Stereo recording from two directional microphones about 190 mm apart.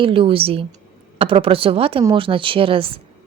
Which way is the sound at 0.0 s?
30° right (ahead or behind).